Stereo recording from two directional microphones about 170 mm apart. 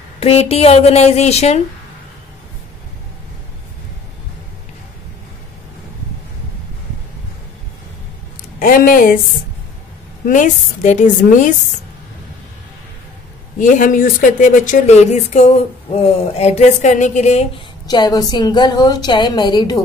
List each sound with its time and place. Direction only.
0.2 s a woman's voice: 35° left (ahead or behind)
8.5 s speech: 55° left (ahead or behind)
10.2 s speech: 50° left (ahead or behind)
13.6 s speech: 50° left (ahead or behind)
17.8 s a woman's voice: 25° left (ahead or behind)